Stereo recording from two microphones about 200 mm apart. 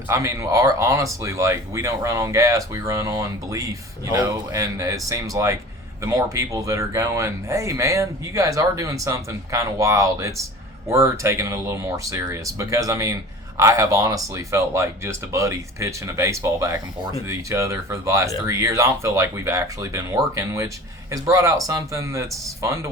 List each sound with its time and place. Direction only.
0.1 s speech: 15° right (ahead or behind)